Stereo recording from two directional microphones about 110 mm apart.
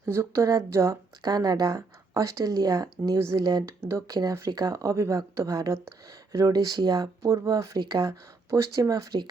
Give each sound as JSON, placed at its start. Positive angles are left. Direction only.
{"t": 0.0, "sound": "a woman's voice", "side_deg": -25}
{"t": 3.8, "sound": "a woman's voice", "side_deg": -25}